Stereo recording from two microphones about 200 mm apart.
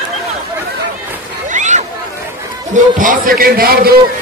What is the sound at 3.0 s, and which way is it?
Speech, 45° right (ahead or behind).